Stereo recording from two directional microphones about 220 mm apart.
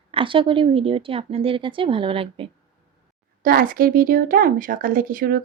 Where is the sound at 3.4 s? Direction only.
40° right (ahead or behind).